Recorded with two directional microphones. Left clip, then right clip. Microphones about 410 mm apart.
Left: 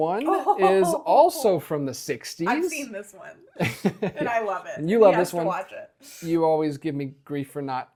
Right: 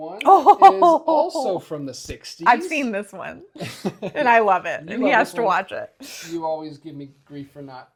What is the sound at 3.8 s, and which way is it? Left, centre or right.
Speech, left.